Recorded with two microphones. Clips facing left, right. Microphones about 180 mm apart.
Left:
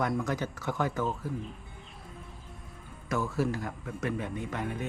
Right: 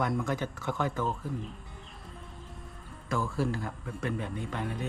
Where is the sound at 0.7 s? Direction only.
20° left (ahead or behind).